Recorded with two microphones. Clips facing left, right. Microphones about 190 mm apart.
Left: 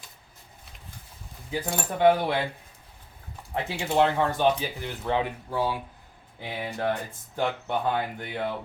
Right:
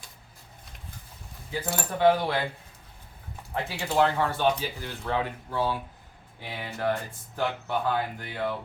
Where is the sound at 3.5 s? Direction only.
20° left (ahead or behind).